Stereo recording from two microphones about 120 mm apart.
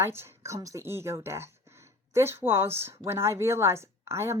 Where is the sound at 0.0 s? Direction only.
20° right (ahead or behind).